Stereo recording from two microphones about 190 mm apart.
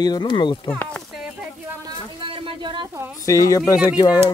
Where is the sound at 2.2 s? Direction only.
25° right (ahead or behind).